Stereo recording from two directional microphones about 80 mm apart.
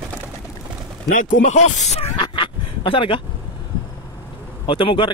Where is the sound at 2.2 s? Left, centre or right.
Left.